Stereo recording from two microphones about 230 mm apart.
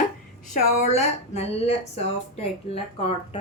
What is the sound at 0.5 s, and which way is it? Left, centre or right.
A woman's voice, left.